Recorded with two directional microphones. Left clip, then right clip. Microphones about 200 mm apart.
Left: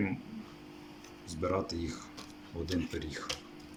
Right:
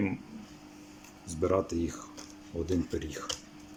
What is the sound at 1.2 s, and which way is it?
Speech, 15° right (ahead or behind).